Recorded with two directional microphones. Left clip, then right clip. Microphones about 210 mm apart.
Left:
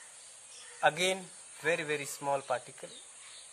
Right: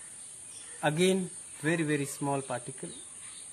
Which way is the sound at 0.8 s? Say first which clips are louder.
Right 1 dB; 30° left (ahead or behind).